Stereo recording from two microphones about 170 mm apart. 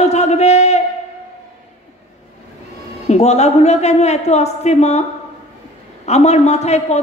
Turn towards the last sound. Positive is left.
turn(degrees=40)  # may be behind; listen again after turning